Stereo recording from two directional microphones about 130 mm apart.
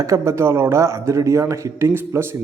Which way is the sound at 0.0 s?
25° right (ahead or behind).